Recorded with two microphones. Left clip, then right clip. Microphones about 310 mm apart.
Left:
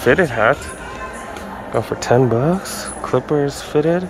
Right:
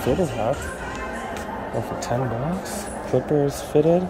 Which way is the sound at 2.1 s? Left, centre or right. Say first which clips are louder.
Left 12 dB; left.